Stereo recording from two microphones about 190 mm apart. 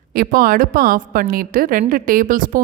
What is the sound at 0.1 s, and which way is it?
A woman's voice, 50° right (ahead or behind).